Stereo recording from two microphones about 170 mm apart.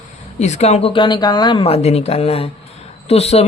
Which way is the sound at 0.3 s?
40° left (ahead or behind).